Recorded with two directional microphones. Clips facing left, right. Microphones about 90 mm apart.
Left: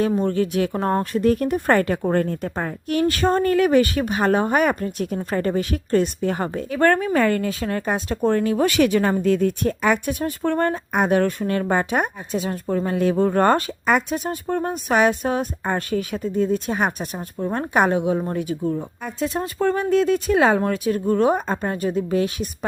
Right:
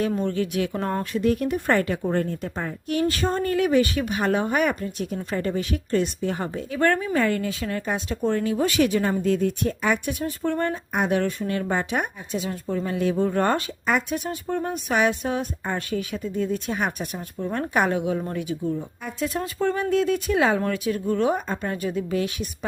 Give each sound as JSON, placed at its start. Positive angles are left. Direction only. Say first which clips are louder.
{"t": 0.2, "sound": "speech", "louder": "left 4 dB", "side_deg": 40}
{"t": 4.0, "sound": "speech", "louder": "left 4 dB", "side_deg": 40}
{"t": 18.4, "sound": "speech", "louder": "left 3 dB", "side_deg": 45}
{"t": 19.2, "sound": "speech", "louder": "left 3 dB", "side_deg": 30}
{"t": 19.5, "sound": "speech", "louder": "left 4 dB", "side_deg": 45}
{"t": 19.8, "sound": "speech", "louder": "left 4 dB", "side_deg": 35}